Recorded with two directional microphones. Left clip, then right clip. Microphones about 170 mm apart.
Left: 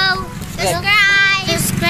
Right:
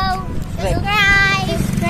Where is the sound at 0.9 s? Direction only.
10° right (ahead or behind).